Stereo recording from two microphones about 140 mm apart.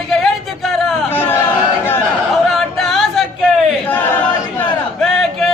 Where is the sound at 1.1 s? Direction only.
15° left (ahead or behind).